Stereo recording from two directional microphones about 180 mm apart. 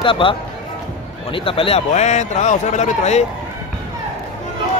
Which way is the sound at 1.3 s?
30° left (ahead or behind).